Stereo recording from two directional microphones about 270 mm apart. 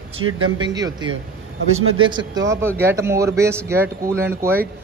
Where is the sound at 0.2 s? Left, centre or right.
Right.